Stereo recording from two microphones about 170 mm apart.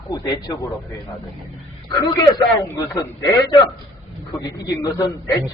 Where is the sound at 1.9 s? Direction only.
20° left (ahead or behind).